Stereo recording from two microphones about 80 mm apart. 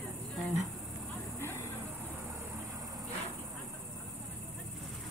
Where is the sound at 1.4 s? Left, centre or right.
Left.